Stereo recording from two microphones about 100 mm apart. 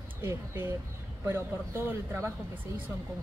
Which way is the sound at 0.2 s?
25° right (ahead or behind).